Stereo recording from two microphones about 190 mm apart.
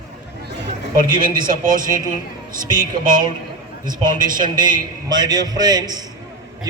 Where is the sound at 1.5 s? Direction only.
45° right (ahead or behind).